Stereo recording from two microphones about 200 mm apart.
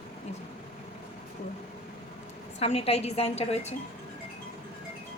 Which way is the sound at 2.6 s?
30° left (ahead or behind).